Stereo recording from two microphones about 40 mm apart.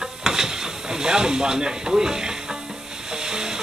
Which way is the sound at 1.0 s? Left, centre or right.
Centre.